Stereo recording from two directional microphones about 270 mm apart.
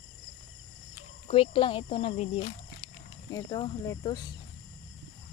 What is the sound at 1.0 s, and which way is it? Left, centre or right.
Speech, left.